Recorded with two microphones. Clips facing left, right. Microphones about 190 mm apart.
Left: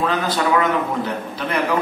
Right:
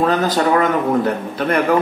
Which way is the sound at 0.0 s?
40° right (ahead or behind).